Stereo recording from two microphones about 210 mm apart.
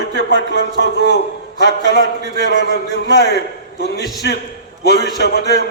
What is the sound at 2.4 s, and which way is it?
A man's voice, 55° left (ahead or behind).